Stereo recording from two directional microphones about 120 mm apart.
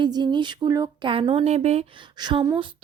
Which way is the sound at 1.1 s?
50° right (ahead or behind).